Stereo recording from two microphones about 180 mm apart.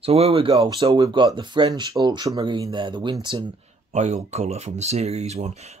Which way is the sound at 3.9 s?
40° right (ahead or behind).